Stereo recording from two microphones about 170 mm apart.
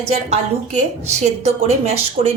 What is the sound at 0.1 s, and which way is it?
Speech, 40° right (ahead or behind).